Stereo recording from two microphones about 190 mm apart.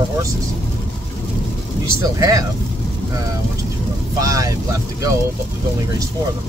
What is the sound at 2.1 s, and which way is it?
Speech, 15° right (ahead or behind).